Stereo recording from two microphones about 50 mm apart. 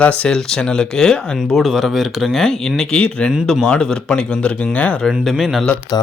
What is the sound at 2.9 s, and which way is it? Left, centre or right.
A man's voice, left.